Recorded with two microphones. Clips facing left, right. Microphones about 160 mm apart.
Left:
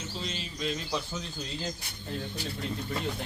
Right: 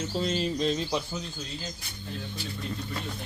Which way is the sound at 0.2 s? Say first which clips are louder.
Right 10 dB; 45° right (ahead or behind).